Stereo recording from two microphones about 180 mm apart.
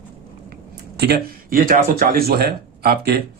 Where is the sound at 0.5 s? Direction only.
60° right (ahead or behind).